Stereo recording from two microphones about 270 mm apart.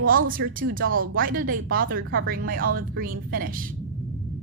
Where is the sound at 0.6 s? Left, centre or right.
Right.